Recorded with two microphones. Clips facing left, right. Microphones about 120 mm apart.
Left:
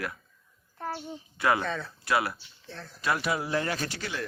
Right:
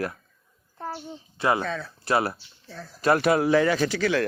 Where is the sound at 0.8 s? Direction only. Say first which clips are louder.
Right 1 dB; 10° right (ahead or behind).